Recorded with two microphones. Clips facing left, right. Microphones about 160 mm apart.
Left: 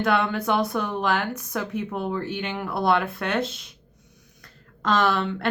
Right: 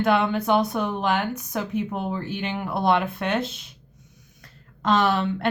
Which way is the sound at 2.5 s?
20° right (ahead or behind).